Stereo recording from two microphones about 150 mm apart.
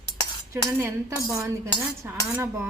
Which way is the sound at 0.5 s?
20° right (ahead or behind).